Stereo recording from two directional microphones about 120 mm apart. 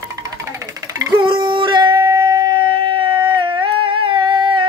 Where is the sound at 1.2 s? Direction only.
40° right (ahead or behind).